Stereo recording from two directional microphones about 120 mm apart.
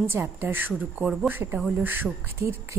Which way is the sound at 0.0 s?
20° right (ahead or behind).